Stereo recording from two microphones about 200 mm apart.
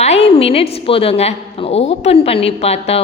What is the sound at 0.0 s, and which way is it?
A woman's voice, 30° left (ahead or behind).